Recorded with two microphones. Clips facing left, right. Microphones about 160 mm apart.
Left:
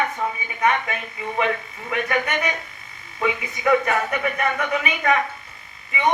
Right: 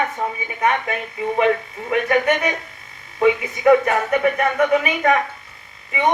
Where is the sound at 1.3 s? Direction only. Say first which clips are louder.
Right 5 dB; 45° right (ahead or behind).